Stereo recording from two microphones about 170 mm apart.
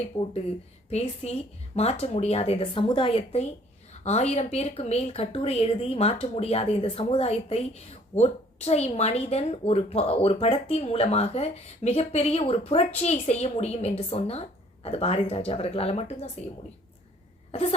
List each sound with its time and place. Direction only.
0.1 s speech: 15° left (ahead or behind)
0.9 s speech: 40° left (ahead or behind)
17.5 s cough: 35° left (ahead or behind)